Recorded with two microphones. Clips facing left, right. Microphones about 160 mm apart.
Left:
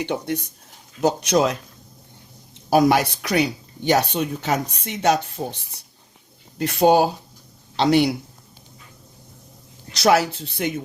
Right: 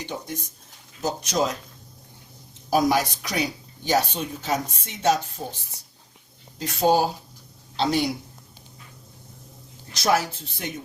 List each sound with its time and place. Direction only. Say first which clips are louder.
0.0 s speech: left 8 dB; 65° left (ahead or behind)
2.6 s speech: left 4 dB; 70° left (ahead or behind)
9.9 s speech: left 5 dB; 75° left (ahead or behind)